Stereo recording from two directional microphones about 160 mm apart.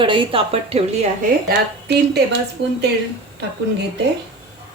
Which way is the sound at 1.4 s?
90° right.